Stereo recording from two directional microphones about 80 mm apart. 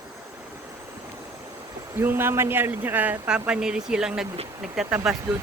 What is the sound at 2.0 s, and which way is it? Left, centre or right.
Speech, right.